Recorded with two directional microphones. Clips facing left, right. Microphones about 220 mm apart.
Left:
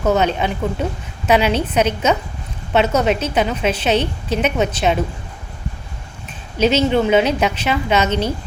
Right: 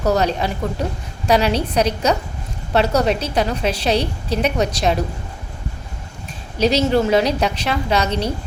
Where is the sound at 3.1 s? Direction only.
35° right (ahead or behind).